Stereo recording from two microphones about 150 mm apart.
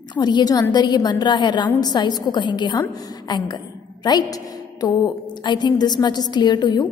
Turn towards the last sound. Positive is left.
turn(degrees=30)  # may be behind; listen again after turning